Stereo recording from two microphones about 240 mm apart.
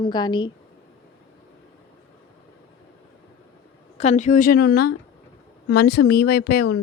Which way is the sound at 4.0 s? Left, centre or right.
Left.